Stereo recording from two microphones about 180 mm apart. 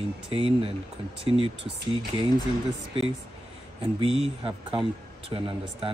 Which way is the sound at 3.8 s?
30° right (ahead or behind).